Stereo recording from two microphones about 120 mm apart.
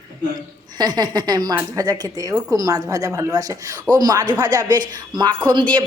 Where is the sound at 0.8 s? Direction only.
35° right (ahead or behind).